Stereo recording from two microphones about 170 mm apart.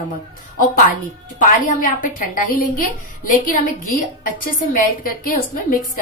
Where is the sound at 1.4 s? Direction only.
50° left (ahead or behind).